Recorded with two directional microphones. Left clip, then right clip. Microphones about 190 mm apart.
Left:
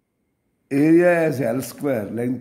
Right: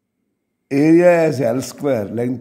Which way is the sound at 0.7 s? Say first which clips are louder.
Right 4 dB; 25° right (ahead or behind).